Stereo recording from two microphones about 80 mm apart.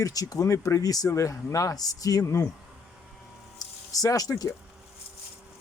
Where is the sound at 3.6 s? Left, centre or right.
Left.